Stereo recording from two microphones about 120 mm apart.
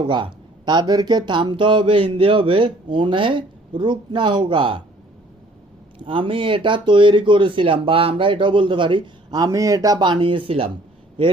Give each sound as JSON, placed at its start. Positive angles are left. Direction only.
{"t": 0.1, "sound": "speech", "side_deg": -40}
{"t": 6.0, "sound": "speech", "side_deg": -45}